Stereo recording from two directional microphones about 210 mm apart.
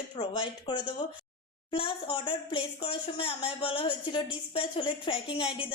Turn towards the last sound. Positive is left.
turn(degrees=25)  # may be behind; listen again after turning